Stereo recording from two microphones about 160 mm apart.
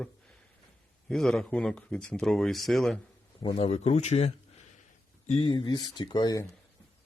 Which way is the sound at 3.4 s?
35° left (ahead or behind).